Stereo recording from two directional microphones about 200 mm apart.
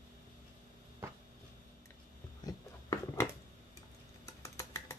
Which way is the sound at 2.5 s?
20° left (ahead or behind).